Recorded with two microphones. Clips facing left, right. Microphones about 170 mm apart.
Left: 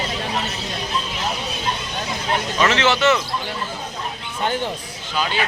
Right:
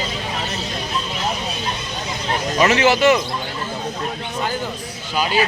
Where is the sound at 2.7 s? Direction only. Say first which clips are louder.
Right 3 dB; 10° right (ahead or behind).